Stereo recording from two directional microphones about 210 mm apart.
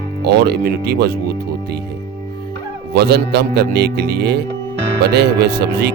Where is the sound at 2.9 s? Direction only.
50° right (ahead or behind).